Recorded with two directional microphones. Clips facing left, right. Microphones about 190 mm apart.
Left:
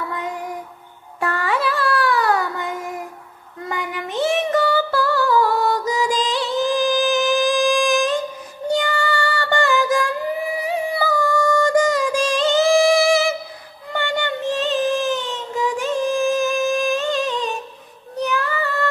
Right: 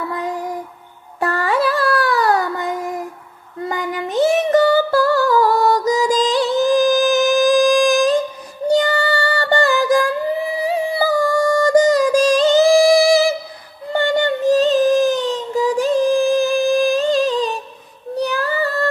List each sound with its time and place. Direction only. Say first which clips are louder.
1.2 s child singing: right 4 dB; 40° right (ahead or behind)
3.6 s female singing: right 4 dB; 40° right (ahead or behind)
8.6 s child singing: right 5 dB; 40° right (ahead or behind)
10.5 s music: right 3 dB; 35° right (ahead or behind)
18.1 s child singing: right 3 dB; 35° right (ahead or behind)